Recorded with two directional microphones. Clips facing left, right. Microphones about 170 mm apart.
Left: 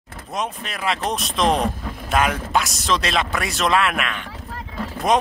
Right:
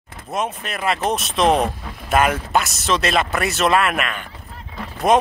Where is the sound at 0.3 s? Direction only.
Centre (ahead or behind).